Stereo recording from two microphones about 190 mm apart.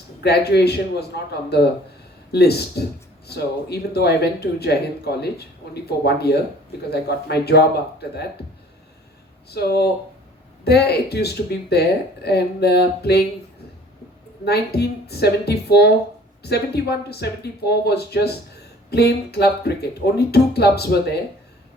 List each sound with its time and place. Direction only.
0.2 s speech: 60° left (ahead or behind)
9.5 s speech: 55° left (ahead or behind)
14.4 s speech: 55° left (ahead or behind)